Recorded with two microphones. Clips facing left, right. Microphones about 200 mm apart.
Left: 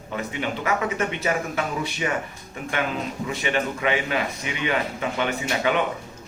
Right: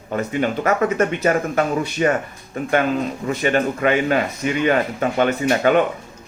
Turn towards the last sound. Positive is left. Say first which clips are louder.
# right 7 dB
turn(degrees=-50)  # may be behind; listen again after turning